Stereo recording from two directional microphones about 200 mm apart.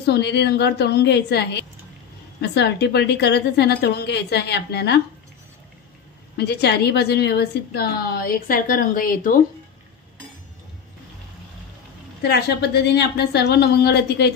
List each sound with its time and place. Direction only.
0.0 s a woman's voice: 55° left (ahead or behind)
6.3 s a woman's voice: 55° left (ahead or behind)
12.2 s a woman's voice: 55° left (ahead or behind)